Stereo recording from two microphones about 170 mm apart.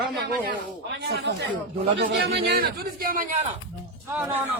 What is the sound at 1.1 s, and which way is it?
A man's voice, 75° right (ahead or behind).